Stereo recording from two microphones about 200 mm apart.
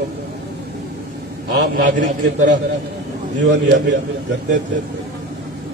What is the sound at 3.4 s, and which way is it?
Speech, 60° right (ahead or behind).